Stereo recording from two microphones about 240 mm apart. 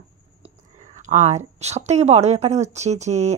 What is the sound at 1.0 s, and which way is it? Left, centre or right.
A woman's voice, right.